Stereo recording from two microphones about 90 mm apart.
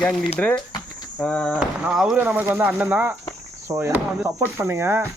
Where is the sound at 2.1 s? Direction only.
20° right (ahead or behind).